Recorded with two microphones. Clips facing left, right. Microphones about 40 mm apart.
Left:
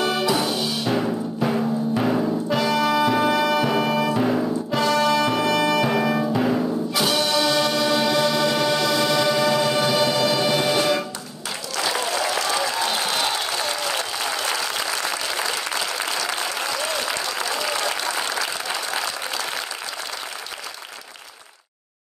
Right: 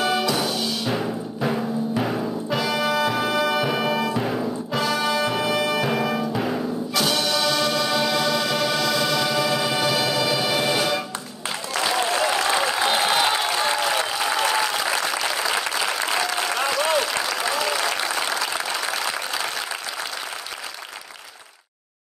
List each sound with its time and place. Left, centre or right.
0.0 s music: centre
0.5 s timpani: centre
6.3 s music: centre
11.7 s applause: right
16.4 s applause: centre